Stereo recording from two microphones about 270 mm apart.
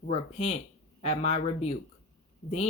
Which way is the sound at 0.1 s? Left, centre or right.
Left.